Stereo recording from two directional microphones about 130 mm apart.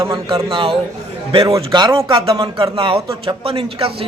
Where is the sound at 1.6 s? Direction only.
40° right (ahead or behind).